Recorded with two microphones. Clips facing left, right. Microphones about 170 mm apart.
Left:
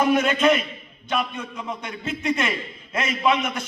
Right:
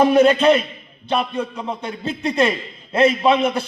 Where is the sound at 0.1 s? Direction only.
35° right (ahead or behind).